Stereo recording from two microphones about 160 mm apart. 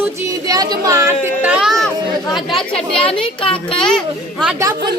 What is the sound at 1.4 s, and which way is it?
Speech, 5° right (ahead or behind).